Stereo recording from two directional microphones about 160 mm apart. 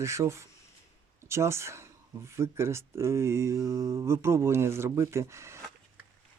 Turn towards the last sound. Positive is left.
turn(degrees=-15)  # may be behind; listen again after turning